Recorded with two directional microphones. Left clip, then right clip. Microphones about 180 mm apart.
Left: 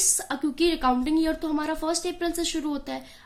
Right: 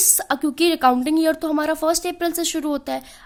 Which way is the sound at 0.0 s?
50° right (ahead or behind).